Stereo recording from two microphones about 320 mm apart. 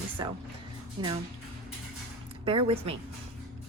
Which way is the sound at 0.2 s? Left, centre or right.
Centre.